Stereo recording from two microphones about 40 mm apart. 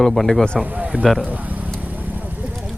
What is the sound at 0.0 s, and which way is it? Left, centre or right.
Speech, centre.